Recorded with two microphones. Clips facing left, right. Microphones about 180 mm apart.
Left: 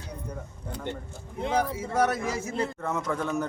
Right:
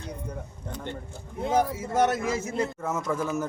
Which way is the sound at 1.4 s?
5° right (ahead or behind).